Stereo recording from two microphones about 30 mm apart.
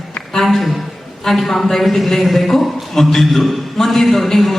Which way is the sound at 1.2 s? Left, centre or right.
Centre.